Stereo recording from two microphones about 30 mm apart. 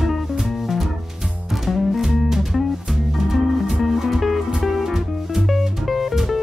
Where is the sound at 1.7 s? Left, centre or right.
Centre.